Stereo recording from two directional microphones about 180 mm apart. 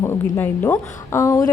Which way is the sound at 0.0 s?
15° left (ahead or behind).